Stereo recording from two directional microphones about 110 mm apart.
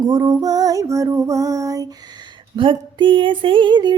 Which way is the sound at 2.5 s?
50° right (ahead or behind).